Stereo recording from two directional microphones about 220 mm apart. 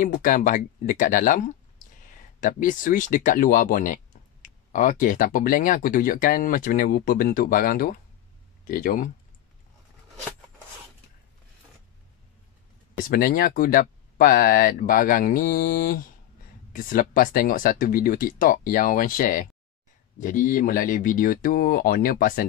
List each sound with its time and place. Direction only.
0.0 s speech: 40° left (ahead or behind)
13.1 s speech: 40° left (ahead or behind)